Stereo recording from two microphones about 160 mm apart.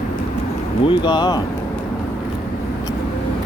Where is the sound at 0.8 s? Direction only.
30° left (ahead or behind).